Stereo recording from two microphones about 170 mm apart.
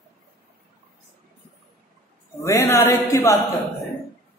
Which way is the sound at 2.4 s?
20° left (ahead or behind).